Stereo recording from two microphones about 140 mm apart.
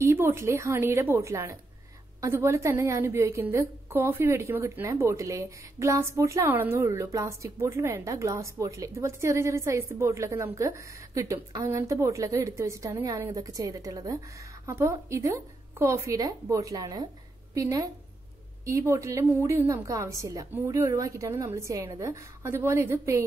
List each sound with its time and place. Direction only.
0.0 s a woman's voice: 20° right (ahead or behind)